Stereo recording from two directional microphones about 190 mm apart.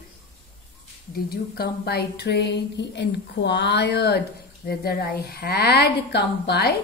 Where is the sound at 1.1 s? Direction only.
55° left (ahead or behind).